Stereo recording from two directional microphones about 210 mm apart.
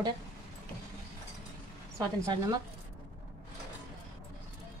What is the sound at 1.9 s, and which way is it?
Speech, 15° right (ahead or behind).